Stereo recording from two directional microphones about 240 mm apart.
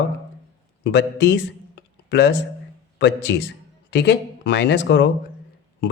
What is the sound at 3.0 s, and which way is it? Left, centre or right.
Speech, left.